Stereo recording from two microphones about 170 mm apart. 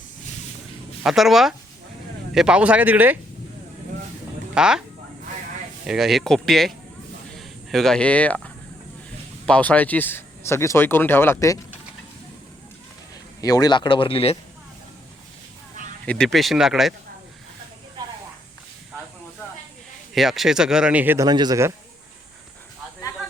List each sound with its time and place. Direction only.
1.0 s speech: centre (ahead or behind)
4.5 s speech: 5° right (ahead or behind)
5.8 s speech: 5° right (ahead or behind)
9.5 s speech: 10° left (ahead or behind)
13.4 s speech: 20° left (ahead or behind)
16.0 s speech: 5° left (ahead or behind)
20.1 s speech: centre (ahead or behind)
21.2 s a man's voice: 25° right (ahead or behind)